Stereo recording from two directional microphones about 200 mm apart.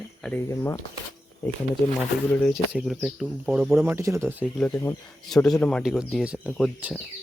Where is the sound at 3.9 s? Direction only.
15° right (ahead or behind).